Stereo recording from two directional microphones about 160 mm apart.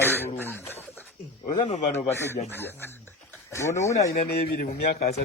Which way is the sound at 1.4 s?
40° left (ahead or behind).